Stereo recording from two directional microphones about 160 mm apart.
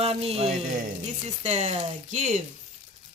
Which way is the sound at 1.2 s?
45° right (ahead or behind).